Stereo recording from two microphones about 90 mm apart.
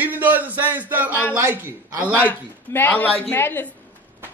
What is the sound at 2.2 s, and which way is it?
A woman's voice, 20° left (ahead or behind).